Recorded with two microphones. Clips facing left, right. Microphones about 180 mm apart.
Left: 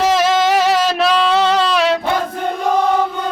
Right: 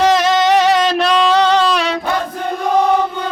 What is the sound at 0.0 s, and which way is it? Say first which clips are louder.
Music: right 1 dB; 5° left (ahead or behind).